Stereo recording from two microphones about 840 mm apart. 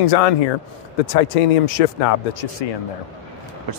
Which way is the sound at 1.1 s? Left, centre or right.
Left.